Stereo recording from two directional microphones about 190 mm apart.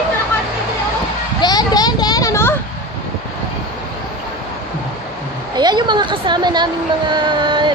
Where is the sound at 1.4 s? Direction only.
20° left (ahead or behind).